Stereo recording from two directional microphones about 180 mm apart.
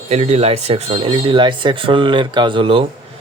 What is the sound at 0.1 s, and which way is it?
Speech, 35° right (ahead or behind).